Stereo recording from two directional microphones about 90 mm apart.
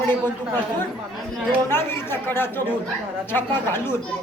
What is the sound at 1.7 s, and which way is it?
Speech, 25° left (ahead or behind).